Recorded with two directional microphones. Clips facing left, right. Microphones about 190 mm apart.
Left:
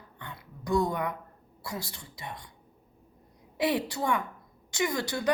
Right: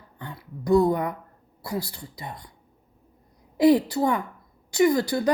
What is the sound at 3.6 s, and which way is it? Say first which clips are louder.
Speech: right 10 dB; 35° right (ahead or behind).